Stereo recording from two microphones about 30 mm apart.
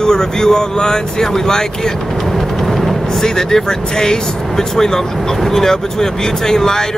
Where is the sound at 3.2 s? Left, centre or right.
Centre.